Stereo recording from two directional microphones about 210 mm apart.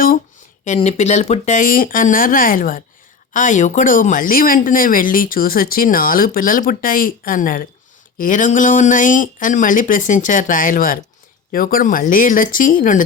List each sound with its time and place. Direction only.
0.6 s speech: 35° left (ahead or behind)